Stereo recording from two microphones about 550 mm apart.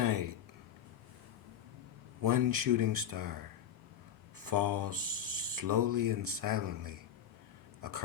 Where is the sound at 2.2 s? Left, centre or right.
Right.